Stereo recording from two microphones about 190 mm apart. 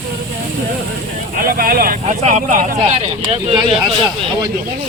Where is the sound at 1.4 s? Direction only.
50° right (ahead or behind).